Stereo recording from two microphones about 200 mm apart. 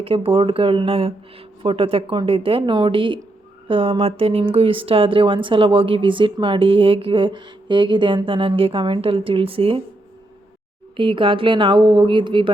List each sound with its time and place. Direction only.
0.0 s speech: 25° right (ahead or behind)
10.9 s speech: 25° right (ahead or behind)